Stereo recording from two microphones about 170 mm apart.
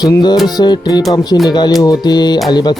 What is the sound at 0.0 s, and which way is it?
Speech, 25° left (ahead or behind).